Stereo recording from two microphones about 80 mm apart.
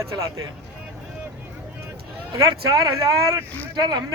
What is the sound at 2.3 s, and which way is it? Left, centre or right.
Speech, right.